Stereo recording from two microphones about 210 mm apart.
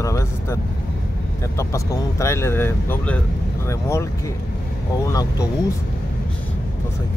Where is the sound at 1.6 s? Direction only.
15° left (ahead or behind).